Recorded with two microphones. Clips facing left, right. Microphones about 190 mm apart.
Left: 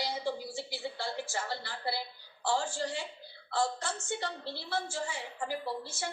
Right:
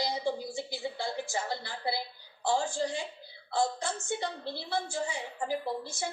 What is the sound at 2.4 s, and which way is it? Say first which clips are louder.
A woman's voice: right 3 dB; 15° right (ahead or behind).